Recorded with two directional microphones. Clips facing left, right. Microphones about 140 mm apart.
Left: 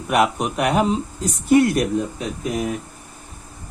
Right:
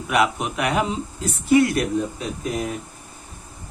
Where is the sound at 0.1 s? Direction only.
40° left (ahead or behind).